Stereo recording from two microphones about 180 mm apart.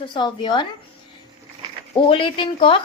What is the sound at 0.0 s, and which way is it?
Speech, 25° left (ahead or behind).